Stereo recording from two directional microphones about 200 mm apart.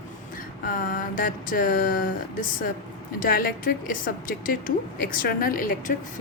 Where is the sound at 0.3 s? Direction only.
45° left (ahead or behind).